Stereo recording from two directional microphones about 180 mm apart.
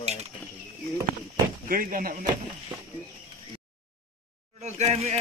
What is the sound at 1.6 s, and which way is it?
Speech, 50° right (ahead or behind).